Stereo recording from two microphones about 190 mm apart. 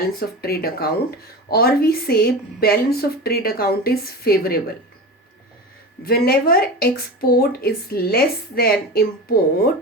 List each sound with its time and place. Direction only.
0.2 s a woman's voice: 55° left (ahead or behind)
6.1 s a woman's voice: 55° left (ahead or behind)